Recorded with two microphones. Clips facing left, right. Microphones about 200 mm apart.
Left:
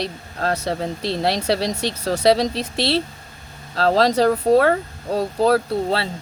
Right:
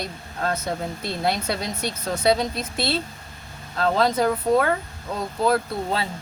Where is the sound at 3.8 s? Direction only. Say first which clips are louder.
Left 4 dB; 85° left.